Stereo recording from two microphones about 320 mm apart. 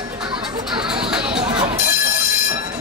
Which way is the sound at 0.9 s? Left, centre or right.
Centre.